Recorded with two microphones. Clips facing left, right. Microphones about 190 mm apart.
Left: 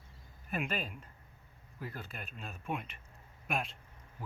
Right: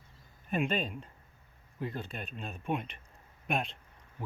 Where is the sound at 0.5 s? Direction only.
30° right (ahead or behind).